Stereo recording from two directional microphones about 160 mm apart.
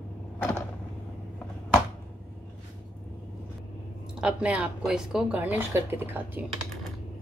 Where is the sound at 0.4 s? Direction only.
15° left (ahead or behind).